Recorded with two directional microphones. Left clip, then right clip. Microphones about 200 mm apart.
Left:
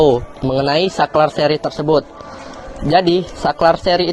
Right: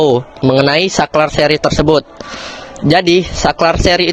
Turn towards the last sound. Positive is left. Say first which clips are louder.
# right 2 dB
turn(degrees=-50)  # may be behind; listen again after turning